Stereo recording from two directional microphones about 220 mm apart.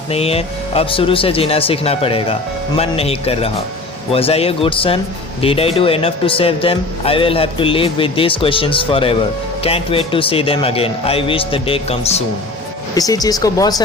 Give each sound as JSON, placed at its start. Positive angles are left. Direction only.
{"t": 0.1, "sound": "speech", "side_deg": 25}
{"t": 12.9, "sound": "speech", "side_deg": 15}